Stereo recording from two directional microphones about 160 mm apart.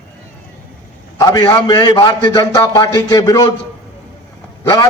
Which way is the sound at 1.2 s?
25° left (ahead or behind).